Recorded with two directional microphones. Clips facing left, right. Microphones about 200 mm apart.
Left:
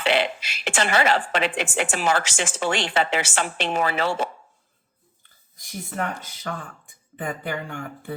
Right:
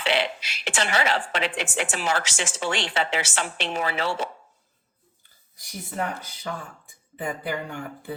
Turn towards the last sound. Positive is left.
turn(degrees=-15)  # may be behind; listen again after turning